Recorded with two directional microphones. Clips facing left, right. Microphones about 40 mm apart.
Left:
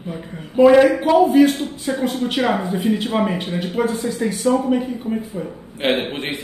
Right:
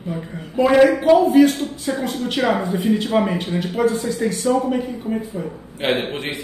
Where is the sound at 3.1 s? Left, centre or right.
Centre.